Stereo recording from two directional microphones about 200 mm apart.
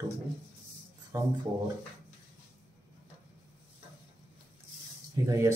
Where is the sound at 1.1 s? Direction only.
20° right (ahead or behind).